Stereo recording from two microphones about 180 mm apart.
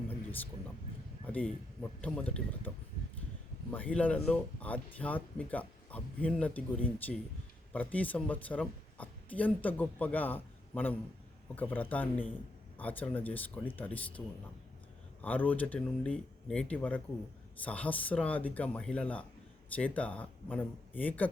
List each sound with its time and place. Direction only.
1.2 s speech: 10° left (ahead or behind)
15.2 s speech: 10° left (ahead or behind)